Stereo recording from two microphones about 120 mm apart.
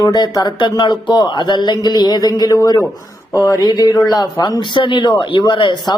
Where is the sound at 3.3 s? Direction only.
25° left (ahead or behind).